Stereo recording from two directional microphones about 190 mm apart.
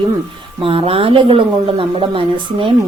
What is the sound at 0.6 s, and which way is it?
A woman's voice, 30° right (ahead or behind).